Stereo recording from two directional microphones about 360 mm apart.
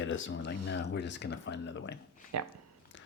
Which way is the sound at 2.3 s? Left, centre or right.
Right.